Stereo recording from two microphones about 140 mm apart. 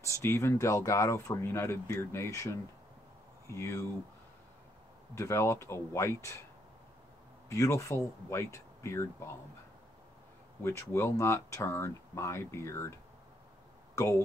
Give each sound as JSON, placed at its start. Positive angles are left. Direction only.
{"t": 0.0, "sound": "speech", "side_deg": 20}
{"t": 5.1, "sound": "speech", "side_deg": 20}
{"t": 7.4, "sound": "speech", "side_deg": 20}
{"t": 10.6, "sound": "speech", "side_deg": 20}
{"t": 13.9, "sound": "speech", "side_deg": 20}